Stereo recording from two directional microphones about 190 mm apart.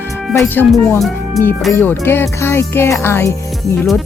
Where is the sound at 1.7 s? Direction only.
10° left (ahead or behind).